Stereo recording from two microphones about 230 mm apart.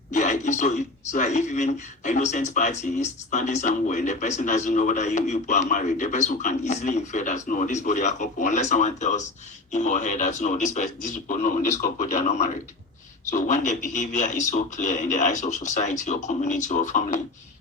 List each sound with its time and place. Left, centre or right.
0.1 s speech: left